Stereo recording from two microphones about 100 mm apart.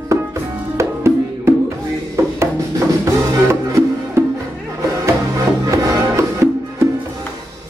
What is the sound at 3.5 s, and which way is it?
Music, 25° right (ahead or behind).